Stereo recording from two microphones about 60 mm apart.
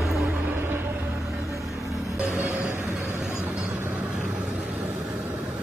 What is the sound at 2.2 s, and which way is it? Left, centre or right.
Vehicle, right.